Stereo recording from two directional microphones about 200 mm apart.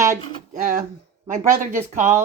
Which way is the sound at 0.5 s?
40° right (ahead or behind).